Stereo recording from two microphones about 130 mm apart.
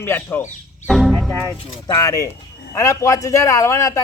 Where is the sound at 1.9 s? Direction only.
25° left (ahead or behind).